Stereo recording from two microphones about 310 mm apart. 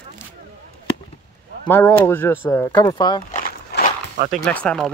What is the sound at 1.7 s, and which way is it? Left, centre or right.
Speech, centre.